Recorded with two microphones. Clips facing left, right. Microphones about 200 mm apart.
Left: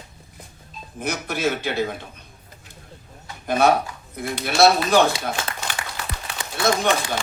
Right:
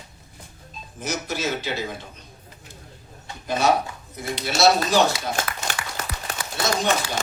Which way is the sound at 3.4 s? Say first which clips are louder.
Left 3 dB; 55° left (ahead or behind).